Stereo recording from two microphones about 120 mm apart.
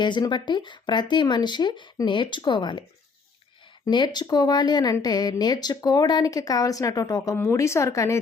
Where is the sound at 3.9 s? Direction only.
40° left (ahead or behind).